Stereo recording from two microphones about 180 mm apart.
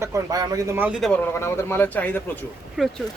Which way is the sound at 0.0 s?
20° right (ahead or behind).